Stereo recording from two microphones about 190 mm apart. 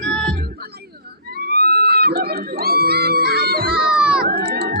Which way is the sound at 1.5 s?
55° right (ahead or behind).